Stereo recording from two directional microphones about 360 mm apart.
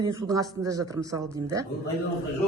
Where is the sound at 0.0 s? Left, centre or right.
Centre.